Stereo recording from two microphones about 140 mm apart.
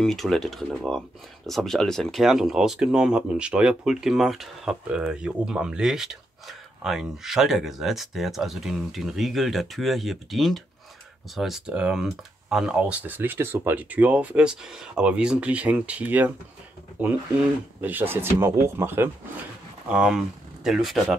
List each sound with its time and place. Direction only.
0.0 s speech: centre (ahead or behind); by 19.0 s 15° right (ahead or behind)
19.9 s speech: 5° right (ahead or behind)